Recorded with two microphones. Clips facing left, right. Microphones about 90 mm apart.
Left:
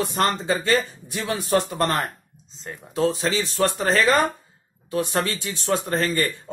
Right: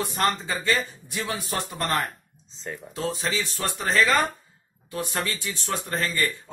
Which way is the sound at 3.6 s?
50° left (ahead or behind).